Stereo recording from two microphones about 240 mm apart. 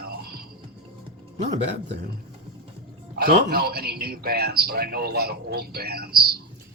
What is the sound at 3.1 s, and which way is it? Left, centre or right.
A man's voice, right.